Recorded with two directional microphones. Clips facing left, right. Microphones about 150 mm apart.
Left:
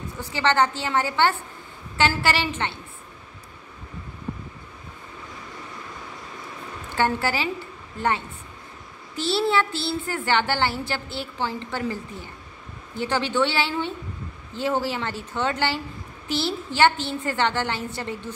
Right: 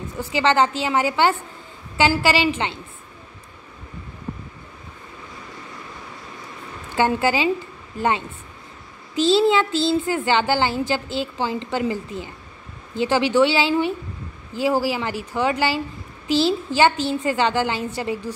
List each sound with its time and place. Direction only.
0.2 s a woman's voice: 15° right (ahead or behind)
7.0 s a woman's voice: 15° right (ahead or behind)
9.1 s a woman's voice: 15° right (ahead or behind)